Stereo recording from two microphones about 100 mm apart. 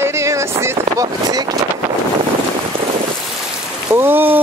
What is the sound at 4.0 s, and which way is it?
Rain, 20° right (ahead or behind).